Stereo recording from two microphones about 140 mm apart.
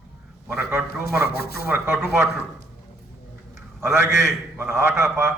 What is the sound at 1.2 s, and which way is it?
Speech, 90° left.